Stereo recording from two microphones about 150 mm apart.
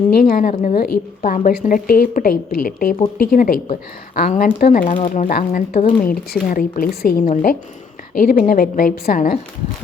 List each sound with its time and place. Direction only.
0.1 s speech: 80° left; by 4.9 s 65° left (ahead or behind)
4.9 s speech: 45° left (ahead or behind)
5.2 s speech: 65° left (ahead or behind); by 7.3 s 85° left
8.1 s speech: 70° left (ahead or behind)